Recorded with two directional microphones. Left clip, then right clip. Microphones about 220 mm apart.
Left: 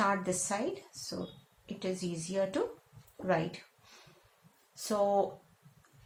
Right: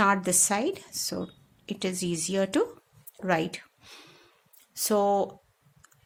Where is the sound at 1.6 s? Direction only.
50° right (ahead or behind).